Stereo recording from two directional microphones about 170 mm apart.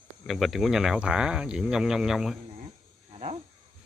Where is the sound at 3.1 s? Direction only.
40° right (ahead or behind).